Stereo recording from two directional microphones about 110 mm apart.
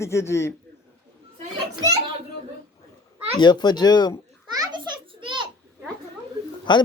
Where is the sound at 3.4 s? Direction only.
40° left (ahead or behind).